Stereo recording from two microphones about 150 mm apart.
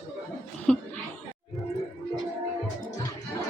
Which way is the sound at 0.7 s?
5° left (ahead or behind).